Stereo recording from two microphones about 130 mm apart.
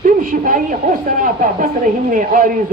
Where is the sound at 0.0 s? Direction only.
90° right.